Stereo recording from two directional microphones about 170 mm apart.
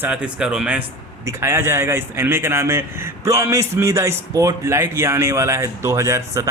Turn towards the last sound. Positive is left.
turn(degrees=-20)  # may be behind; listen again after turning